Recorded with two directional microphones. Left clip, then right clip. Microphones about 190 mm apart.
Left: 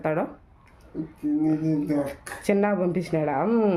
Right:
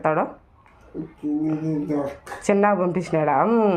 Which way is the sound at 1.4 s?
10° left (ahead or behind).